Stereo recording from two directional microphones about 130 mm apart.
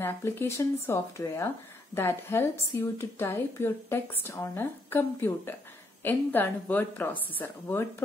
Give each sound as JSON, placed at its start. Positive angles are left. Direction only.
{"t": 0.0, "sound": "a woman's voice", "side_deg": 20}